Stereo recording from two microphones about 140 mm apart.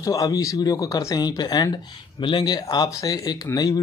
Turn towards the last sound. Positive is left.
turn(degrees=25)  # may be behind; listen again after turning